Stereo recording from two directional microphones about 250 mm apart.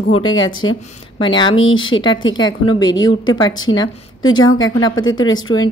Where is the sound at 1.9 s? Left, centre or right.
Left.